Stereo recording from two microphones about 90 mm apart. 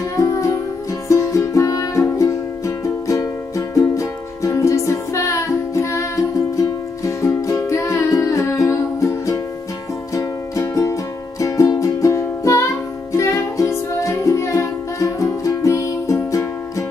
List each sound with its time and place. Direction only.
1.0 s music: 35° left (ahead or behind)